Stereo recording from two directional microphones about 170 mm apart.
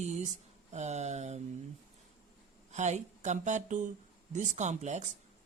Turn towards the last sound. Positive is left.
turn(degrees=-45)  # may be behind; listen again after turning